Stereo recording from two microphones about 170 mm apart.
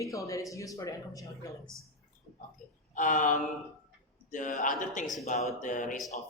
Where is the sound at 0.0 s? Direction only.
20° left (ahead or behind).